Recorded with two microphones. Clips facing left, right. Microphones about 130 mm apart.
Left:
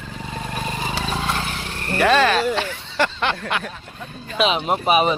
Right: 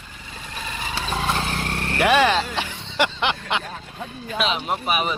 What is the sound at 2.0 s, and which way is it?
A man's voice, 15° right (ahead or behind).